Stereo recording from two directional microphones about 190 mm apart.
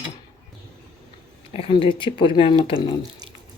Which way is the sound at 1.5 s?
30° left (ahead or behind).